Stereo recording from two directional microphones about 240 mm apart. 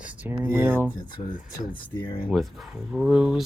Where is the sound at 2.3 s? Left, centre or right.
Centre.